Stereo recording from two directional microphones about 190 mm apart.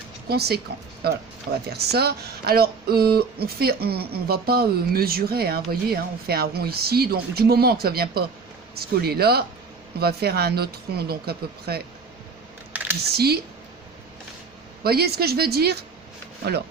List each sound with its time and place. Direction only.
0.3 s speech: 55° right (ahead or behind)
12.7 s typing: 10° right (ahead or behind)
13.1 s speech: 55° right (ahead or behind)
14.8 s speech: 55° right (ahead or behind)